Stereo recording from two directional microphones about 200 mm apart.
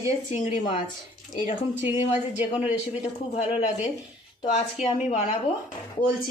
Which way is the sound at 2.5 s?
30° left (ahead or behind).